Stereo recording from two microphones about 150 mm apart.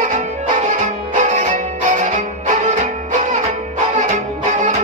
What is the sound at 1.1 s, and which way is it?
Music, 55° right (ahead or behind).